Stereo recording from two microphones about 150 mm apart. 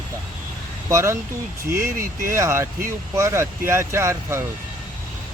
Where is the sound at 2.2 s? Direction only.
15° right (ahead or behind).